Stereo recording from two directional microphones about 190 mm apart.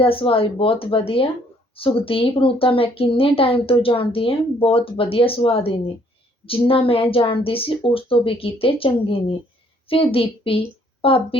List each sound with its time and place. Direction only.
0.0 s a woman's voice: 30° left (ahead or behind)